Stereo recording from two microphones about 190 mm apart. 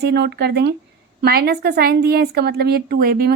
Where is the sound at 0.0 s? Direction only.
60° right (ahead or behind).